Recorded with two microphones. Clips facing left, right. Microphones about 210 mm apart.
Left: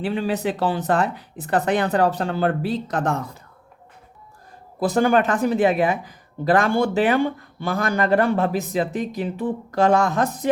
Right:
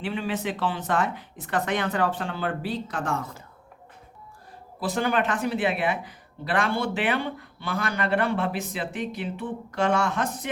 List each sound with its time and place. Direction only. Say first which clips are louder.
0.0 s speech: left 6 dB; 35° left (ahead or behind)
4.8 s speech: left 7 dB; 40° left (ahead or behind)